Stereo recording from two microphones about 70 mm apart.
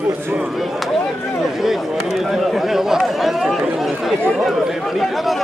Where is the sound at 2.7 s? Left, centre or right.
Centre.